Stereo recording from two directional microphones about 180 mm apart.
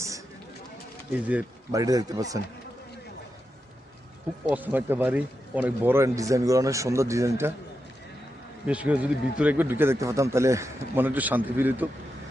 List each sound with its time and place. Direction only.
1.1 s speech: 5° right (ahead or behind)
1.7 s speech: 20° right (ahead or behind)
4.4 s speech: 10° right (ahead or behind)
8.6 s speech: 5° right (ahead or behind)